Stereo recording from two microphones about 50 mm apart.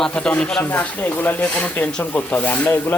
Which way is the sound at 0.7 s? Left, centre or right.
Left.